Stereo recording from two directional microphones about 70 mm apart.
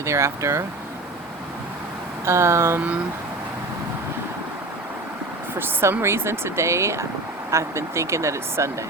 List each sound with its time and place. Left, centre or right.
0.0 s speech: right
2.2 s speech: right
5.5 s speech: right